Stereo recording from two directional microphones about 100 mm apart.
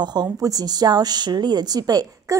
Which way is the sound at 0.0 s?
45° right (ahead or behind).